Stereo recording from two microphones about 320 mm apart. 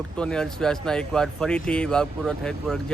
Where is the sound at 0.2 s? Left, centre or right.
Centre.